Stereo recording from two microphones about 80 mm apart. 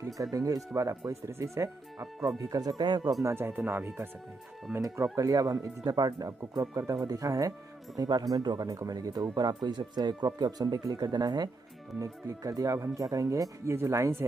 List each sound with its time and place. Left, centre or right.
0.2 s speech: right
3.3 s speech: right
4.8 s speech: right
12.0 s speech: right